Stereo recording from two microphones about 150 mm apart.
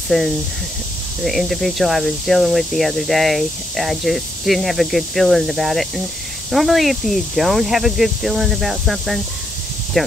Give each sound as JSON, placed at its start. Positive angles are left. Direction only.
{"t": 0.1, "sound": "speech", "side_deg": 0}